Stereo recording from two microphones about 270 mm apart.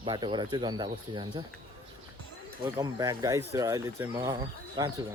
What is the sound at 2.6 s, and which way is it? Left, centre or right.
Speech, centre.